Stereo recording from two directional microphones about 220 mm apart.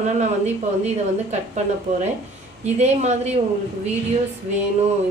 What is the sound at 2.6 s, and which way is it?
Speech, 30° right (ahead or behind).